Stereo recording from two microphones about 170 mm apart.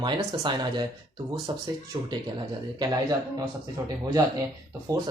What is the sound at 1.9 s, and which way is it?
Speech, 30° right (ahead or behind).